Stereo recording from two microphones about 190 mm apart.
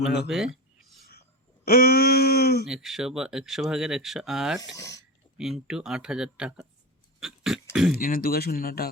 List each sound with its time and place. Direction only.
0.3 s speech: centre (ahead or behind)
1.6 s a sound: 50° left (ahead or behind)
2.6 s speech: centre (ahead or behind)
4.7 s speech: 15° left (ahead or behind)
5.4 s speech: 5° right (ahead or behind)
7.2 s a sound: centre (ahead or behind)
7.9 s speech: 50° left (ahead or behind)